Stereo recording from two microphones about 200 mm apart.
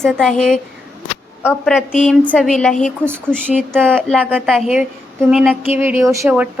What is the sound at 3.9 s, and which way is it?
A woman's voice, 5° left (ahead or behind).